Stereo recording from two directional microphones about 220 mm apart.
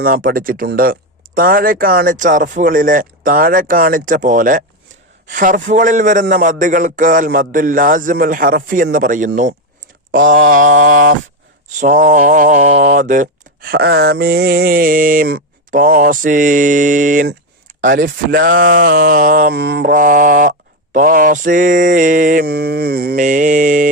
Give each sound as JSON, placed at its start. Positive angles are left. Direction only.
{"t": 0.0, "sound": "speech", "side_deg": -40}